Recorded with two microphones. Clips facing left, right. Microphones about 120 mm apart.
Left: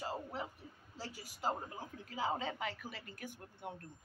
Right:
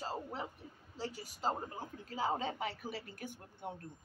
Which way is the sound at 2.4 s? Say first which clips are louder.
Right 2 dB; 35° right (ahead or behind).